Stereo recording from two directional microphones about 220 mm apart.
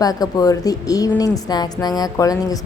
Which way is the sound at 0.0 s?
15° left (ahead or behind).